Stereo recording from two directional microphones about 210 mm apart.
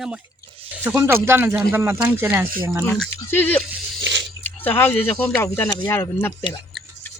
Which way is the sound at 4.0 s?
60° right (ahead or behind).